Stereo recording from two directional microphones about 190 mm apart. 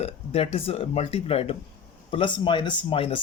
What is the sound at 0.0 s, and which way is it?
Speech, 30° left (ahead or behind).